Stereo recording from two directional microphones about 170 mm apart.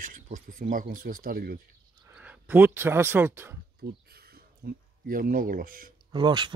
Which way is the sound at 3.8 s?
65° right (ahead or behind).